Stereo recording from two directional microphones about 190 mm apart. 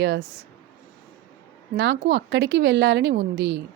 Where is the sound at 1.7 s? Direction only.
65° right (ahead or behind).